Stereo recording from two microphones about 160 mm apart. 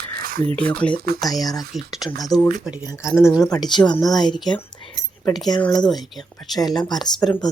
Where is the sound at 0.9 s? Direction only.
75° right (ahead or behind).